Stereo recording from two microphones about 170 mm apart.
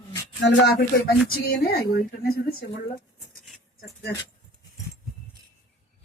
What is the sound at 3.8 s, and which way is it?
Keys jangling, 75° left (ahead or behind).